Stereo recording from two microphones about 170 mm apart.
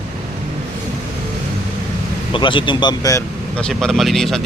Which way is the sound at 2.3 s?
30° left (ahead or behind).